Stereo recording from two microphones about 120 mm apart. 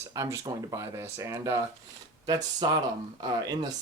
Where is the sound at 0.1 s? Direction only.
25° right (ahead or behind).